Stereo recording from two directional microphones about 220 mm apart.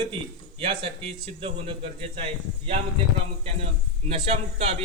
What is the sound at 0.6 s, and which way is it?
A man's voice, 25° right (ahead or behind).